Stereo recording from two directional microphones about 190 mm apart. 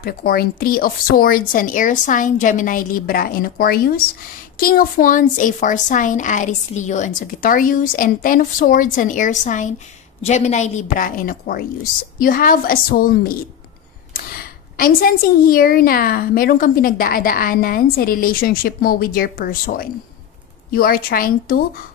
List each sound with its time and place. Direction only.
0.0 s a woman's voice: 50° left (ahead or behind)